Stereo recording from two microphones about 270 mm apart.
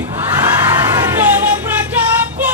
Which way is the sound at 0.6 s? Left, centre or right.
Centre.